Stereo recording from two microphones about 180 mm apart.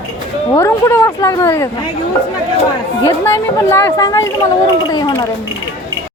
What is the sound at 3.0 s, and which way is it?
A woman's voice, 15° left (ahead or behind).